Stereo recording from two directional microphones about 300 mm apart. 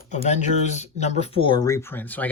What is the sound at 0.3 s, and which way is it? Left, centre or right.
Speech, left.